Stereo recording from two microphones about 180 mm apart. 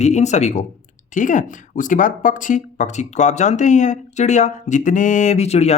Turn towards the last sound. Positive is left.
turn(degrees=35)  # may be behind; listen again after turning